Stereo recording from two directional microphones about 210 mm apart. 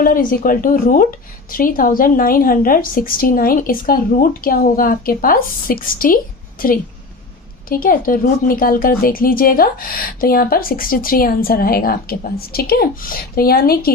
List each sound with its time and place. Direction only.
0.0 s a woman's voice: 40° left (ahead or behind)